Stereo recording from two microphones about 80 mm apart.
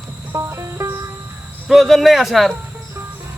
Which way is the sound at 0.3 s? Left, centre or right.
Right.